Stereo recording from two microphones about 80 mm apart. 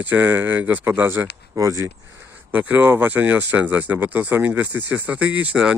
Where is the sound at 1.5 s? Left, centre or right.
Right.